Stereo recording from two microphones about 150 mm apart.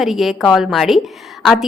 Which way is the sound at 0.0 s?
Centre (ahead or behind).